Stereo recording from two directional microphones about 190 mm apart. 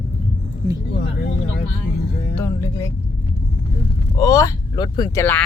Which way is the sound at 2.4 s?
15° left (ahead or behind).